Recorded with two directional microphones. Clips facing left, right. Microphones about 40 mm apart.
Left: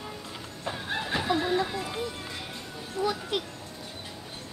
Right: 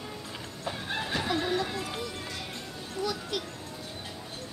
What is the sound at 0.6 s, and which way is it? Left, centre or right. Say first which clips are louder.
Music: left 1 dB; centre.